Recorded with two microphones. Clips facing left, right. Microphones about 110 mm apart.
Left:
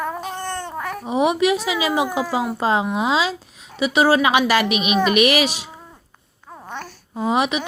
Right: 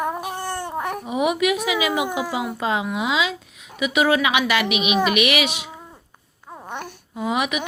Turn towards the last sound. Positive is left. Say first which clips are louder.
# left 3 dB
turn(degrees=30)  # may be behind; listen again after turning